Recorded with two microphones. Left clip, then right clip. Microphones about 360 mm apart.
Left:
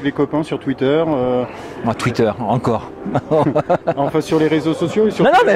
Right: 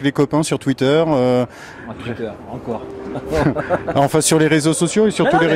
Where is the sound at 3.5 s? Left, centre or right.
Centre.